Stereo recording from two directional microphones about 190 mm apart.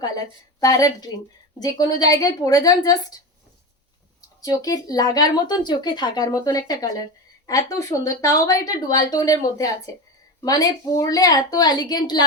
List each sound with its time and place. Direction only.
0.6 s speech: 20° left (ahead or behind)
4.4 s a woman's voice: 20° left (ahead or behind)